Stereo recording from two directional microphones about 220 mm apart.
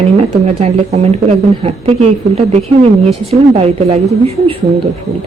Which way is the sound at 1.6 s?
30° right (ahead or behind).